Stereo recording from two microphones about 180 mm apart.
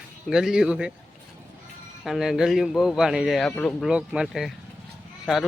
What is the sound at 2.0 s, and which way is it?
A man's voice, centre (ahead or behind).